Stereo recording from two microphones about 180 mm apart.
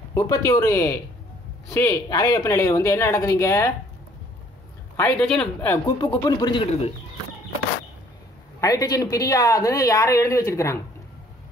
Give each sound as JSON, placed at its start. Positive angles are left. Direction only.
{"t": 0.1, "sound": "speech", "side_deg": 20}
{"t": 4.9, "sound": "speech", "side_deg": 5}
{"t": 6.0, "sound": "speech", "side_deg": 20}
{"t": 8.5, "sound": "speech", "side_deg": 20}